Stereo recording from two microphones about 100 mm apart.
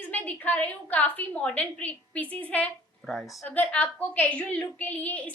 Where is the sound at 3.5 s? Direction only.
15° left (ahead or behind).